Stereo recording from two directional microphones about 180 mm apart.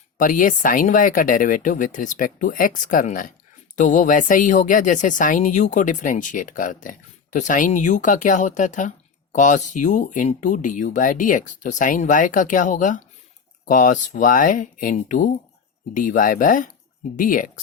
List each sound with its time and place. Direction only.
0.2 s speech: 50° left (ahead or behind)